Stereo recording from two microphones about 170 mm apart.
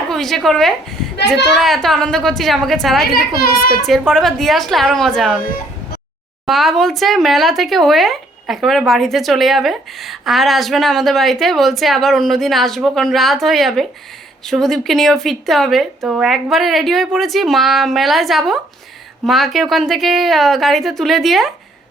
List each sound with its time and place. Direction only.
0.1 s a woman's voice: centre (ahead or behind)
3.2 s a child's voice: 60° left (ahead or behind)
3.8 s a woman's voice: centre (ahead or behind)
6.4 s a woman's voice: centre (ahead or behind)